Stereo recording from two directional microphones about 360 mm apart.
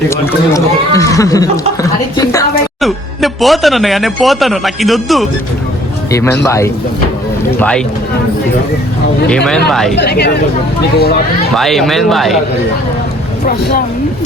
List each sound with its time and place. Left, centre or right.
0.1 s speech: centre
9.3 s speech: centre
10.0 s speech: left
11.5 s speech: centre
13.4 s speech: left